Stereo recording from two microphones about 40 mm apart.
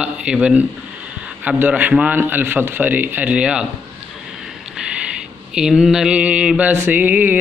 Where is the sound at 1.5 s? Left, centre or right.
Right.